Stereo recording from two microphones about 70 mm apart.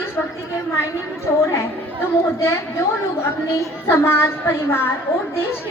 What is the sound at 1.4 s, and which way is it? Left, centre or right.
Speech, left.